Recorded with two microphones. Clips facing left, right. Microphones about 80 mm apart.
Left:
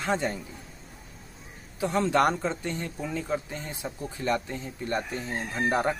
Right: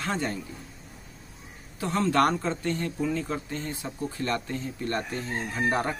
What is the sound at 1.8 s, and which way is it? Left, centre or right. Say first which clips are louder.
Speech: even; centre.